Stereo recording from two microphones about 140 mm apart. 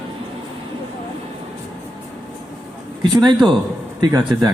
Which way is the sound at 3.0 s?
30° right (ahead or behind).